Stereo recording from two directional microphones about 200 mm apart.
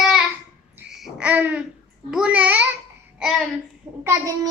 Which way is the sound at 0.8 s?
10° right (ahead or behind).